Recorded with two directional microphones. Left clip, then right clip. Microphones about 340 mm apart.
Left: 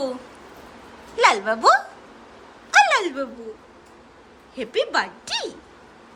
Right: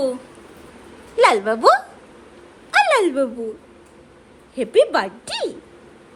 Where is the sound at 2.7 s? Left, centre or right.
Centre.